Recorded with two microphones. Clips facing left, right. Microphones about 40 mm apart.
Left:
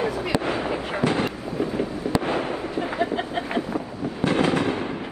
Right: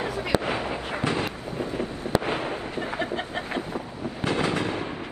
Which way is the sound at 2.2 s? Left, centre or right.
Left.